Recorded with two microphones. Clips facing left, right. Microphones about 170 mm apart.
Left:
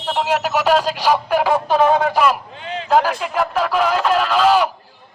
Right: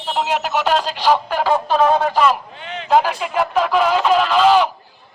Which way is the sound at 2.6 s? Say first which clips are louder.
Left 3 dB; 30° left (ahead or behind).